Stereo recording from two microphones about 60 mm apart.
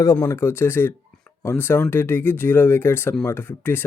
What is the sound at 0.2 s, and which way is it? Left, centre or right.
Speech, left.